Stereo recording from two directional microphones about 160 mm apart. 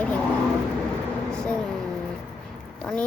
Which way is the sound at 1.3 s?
5° left (ahead or behind).